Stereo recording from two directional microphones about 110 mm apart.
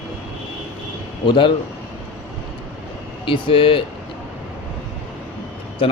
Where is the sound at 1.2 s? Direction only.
50° left (ahead or behind).